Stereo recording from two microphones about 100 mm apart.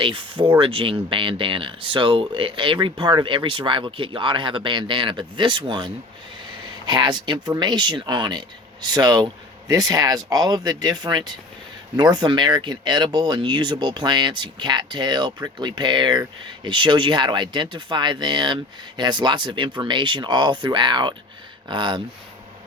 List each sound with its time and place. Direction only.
0.0 s speech: 55° right (ahead or behind)